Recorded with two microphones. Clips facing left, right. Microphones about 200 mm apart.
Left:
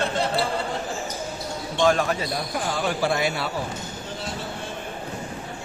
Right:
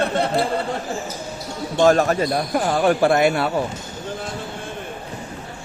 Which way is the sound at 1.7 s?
45° right (ahead or behind).